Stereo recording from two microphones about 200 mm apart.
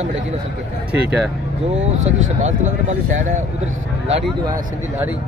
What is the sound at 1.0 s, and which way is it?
Speech, 5° right (ahead or behind).